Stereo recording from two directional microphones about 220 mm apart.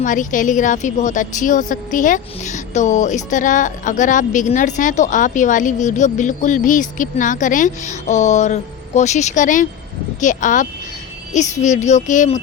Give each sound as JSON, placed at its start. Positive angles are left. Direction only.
{"t": 0.0, "sound": "a woman's voice", "side_deg": 35}